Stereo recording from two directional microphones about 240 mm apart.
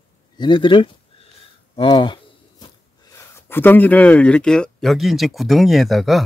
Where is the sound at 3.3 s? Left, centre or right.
Centre.